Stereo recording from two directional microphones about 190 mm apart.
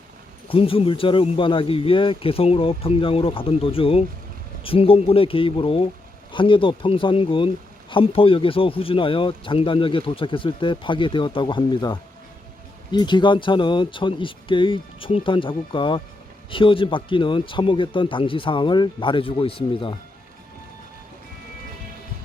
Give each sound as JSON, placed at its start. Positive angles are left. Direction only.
{"t": 0.4, "sound": "speech", "side_deg": 30}